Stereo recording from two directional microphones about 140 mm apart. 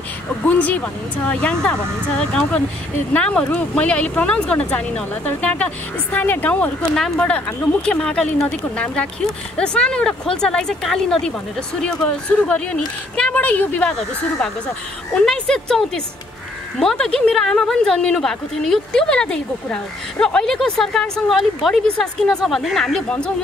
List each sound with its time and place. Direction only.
0.5 s speech: 10° left (ahead or behind)
15.1 s speech: 5° left (ahead or behind)